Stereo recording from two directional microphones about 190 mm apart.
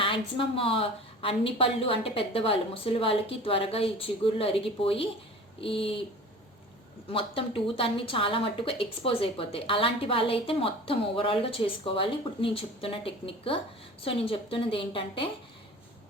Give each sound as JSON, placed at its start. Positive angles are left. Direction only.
{"t": 0.0, "sound": "speech", "side_deg": 30}
{"t": 7.1, "sound": "speech", "side_deg": 30}